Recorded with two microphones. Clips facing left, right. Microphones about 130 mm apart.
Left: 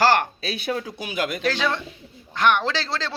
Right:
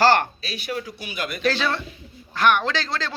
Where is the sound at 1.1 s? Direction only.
90° left.